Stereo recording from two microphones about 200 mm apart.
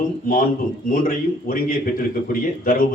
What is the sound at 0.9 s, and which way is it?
A man's voice, 45° left (ahead or behind).